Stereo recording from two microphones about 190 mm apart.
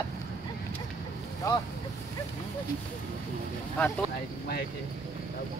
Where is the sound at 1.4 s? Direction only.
15° left (ahead or behind).